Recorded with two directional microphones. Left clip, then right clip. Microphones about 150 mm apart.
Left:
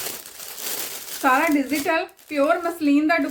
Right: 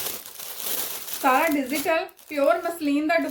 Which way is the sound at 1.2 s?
10° left (ahead or behind).